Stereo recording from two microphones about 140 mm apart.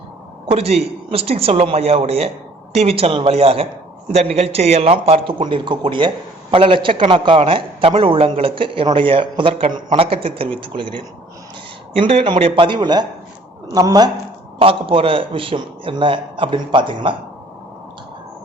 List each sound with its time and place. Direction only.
0.5 s a man's voice: 45° right (ahead or behind); by 14.1 s 25° right (ahead or behind)
14.6 s a man's voice: 40° right (ahead or behind)